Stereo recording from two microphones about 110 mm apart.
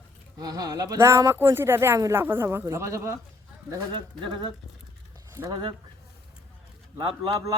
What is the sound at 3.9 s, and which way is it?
Speech, 45° right (ahead or behind).